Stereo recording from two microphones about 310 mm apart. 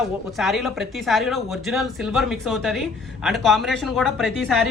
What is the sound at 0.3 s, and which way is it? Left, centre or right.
A woman's voice, centre.